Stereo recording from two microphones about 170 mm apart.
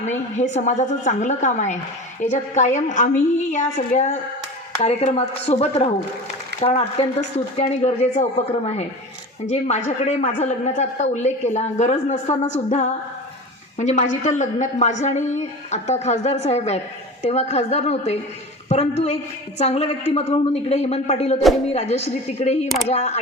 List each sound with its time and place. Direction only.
0.0 s a woman's voice: 45° left (ahead or behind)